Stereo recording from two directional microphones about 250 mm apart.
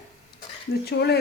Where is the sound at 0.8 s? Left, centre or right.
Left.